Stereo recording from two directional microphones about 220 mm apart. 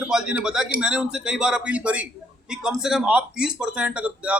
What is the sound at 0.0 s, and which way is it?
Speech, 5° right (ahead or behind).